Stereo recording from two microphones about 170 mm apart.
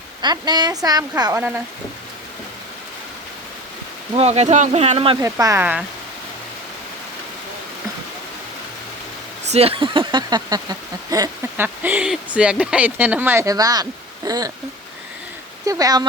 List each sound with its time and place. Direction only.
0.2 s speech: 25° right (ahead or behind)
4.1 s speech: 40° right (ahead or behind)
5.2 s speech: 20° right (ahead or behind)
9.5 s speech: 35° right (ahead or behind)
15.6 s speech: 20° right (ahead or behind)